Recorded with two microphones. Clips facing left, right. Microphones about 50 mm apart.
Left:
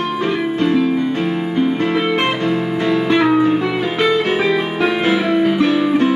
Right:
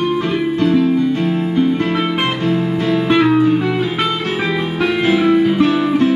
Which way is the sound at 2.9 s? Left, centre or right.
Centre.